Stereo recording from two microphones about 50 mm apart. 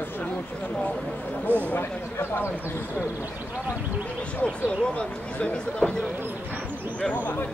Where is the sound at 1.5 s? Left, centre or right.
Right.